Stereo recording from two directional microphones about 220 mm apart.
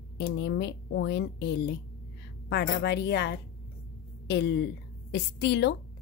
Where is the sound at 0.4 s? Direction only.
50° left (ahead or behind).